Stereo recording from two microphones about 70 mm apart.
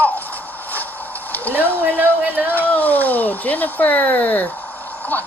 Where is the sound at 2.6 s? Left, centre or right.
Left.